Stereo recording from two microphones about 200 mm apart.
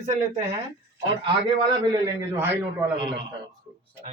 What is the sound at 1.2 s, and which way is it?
A man's voice, 20° right (ahead or behind).